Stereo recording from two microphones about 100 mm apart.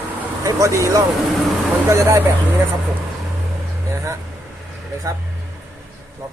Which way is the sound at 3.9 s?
25° right (ahead or behind).